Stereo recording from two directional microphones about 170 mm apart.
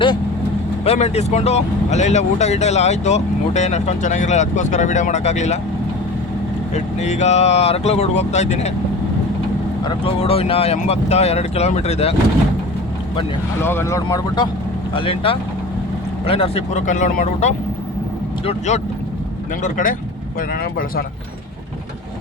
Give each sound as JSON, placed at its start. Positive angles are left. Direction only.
{"t": 0.9, "sound": "speech", "side_deg": 40}
{"t": 6.7, "sound": "speech", "side_deg": 40}
{"t": 9.8, "sound": "speech", "side_deg": 35}
{"t": 13.6, "sound": "speech", "side_deg": 15}